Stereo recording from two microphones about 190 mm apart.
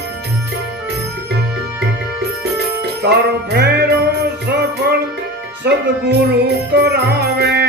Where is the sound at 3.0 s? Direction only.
60° right (ahead or behind).